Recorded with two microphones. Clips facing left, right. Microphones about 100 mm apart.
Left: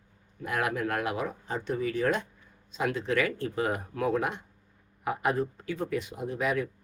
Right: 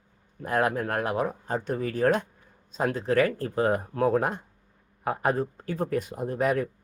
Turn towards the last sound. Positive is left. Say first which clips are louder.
# right 4 dB
turn(degrees=-45)  # may be behind; listen again after turning